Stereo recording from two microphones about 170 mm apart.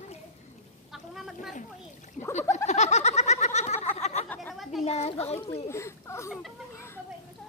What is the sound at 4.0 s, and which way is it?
Chatter, 40° left (ahead or behind).